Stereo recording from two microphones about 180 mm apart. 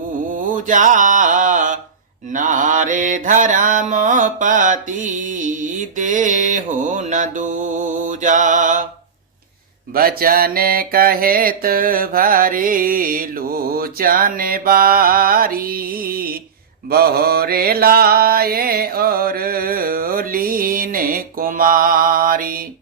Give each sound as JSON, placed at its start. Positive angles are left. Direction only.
{"t": 0.3, "sound": "mantra", "side_deg": -45}
{"t": 9.9, "sound": "mantra", "side_deg": -55}